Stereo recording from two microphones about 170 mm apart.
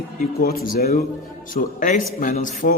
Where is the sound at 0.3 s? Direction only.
60° left (ahead or behind).